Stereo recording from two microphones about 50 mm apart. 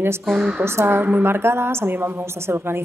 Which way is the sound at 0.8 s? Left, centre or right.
Right.